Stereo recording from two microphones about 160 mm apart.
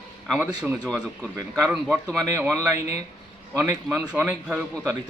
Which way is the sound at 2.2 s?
15° right (ahead or behind).